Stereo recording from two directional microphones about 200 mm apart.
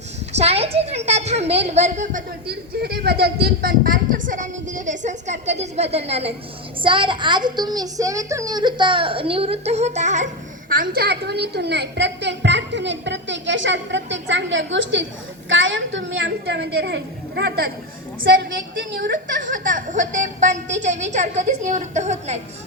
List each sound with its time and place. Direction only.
0.3 s a child's voice: 30° right (ahead or behind)
2.5 s a woman's voice: 50° right (ahead or behind); by 10.2 s 35° right (ahead or behind)
10.7 s a woman's voice: 45° right (ahead or behind)
18.9 s speech: 50° right (ahead or behind); by 22.4 s 35° right (ahead or behind)